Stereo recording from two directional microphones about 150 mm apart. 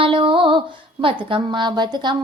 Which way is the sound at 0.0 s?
35° right (ahead or behind).